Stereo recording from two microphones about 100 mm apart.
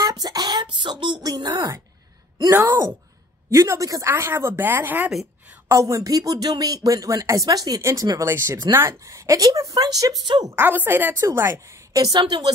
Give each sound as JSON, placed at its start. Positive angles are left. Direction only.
{"t": 0.0, "sound": "a sound", "side_deg": -40}
{"t": 3.4, "sound": "a woman's voice", "side_deg": -30}
{"t": 5.7, "sound": "speech", "side_deg": -30}
{"t": 10.6, "sound": "a woman's voice", "side_deg": -20}